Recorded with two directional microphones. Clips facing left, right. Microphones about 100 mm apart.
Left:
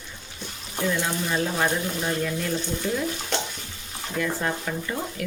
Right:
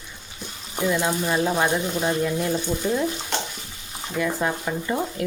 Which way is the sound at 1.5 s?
20° right (ahead or behind).